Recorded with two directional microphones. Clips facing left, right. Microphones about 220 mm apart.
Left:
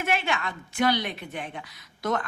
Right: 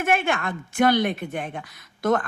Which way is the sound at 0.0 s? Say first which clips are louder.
Right 5 dB; 50° right (ahead or behind).